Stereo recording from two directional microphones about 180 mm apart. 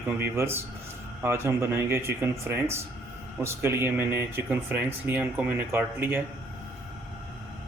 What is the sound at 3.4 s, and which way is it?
Speech, 15° right (ahead or behind).